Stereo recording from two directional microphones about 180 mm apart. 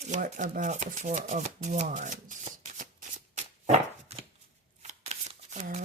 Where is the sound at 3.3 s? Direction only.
40° right (ahead or behind).